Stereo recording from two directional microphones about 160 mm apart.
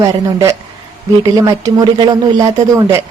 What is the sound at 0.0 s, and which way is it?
A woman's voice, 20° right (ahead or behind).